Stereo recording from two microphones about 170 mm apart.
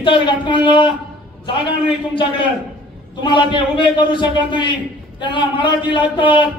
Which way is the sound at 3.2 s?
30° left (ahead or behind).